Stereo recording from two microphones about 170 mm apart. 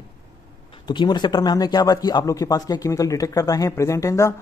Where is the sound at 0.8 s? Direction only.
25° left (ahead or behind).